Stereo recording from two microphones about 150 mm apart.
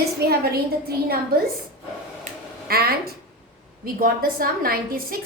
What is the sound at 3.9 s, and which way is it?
A woman's voice, 75° right (ahead or behind).